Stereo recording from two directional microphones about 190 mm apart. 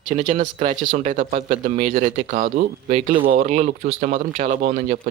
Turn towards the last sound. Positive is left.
turn(degrees=-45)  # may be behind; listen again after turning